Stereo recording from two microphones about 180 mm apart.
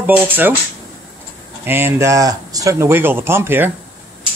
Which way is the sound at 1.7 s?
10° right (ahead or behind).